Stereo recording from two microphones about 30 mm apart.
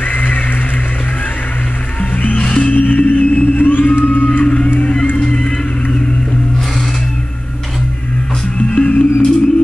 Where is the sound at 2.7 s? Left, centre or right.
Left.